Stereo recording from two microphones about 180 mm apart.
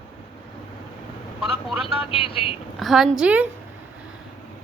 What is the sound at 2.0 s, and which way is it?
Speech, 30° left (ahead or behind).